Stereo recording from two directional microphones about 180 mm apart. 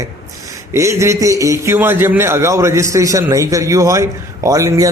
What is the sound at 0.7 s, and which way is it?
A man's voice, 15° right (ahead or behind).